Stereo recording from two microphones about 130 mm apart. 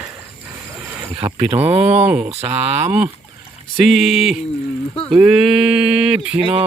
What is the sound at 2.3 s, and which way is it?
Speech, 55° right (ahead or behind).